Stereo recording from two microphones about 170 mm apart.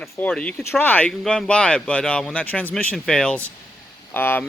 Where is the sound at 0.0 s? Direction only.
5° left (ahead or behind).